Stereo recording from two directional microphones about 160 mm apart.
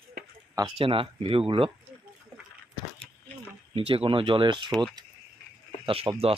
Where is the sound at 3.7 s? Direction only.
35° right (ahead or behind).